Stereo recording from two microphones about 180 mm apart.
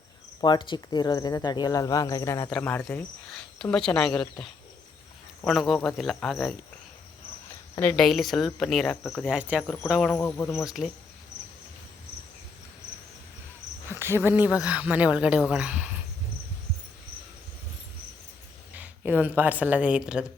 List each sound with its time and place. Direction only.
0.4 s speech: 25° left (ahead or behind); by 4.3 s 5° left (ahead or behind)
5.5 s speech: centre (ahead or behind)
7.8 s speech: 5° left (ahead or behind)
9.9 s speech: 5° left (ahead or behind)
10.2 s cricket: 15° left (ahead or behind)
10.7 s speech: centre (ahead or behind)
13.9 s cricket: 15° right (ahead or behind)
14.3 s a woman's voice: 10° right (ahead or behind)
18.7 s speech: 10° right (ahead or behind)